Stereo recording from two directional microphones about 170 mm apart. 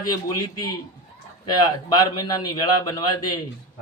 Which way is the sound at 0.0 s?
20° left (ahead or behind).